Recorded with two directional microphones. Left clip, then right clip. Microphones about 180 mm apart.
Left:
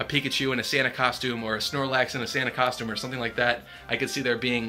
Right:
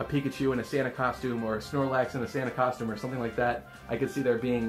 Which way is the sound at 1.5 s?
30° left (ahead or behind).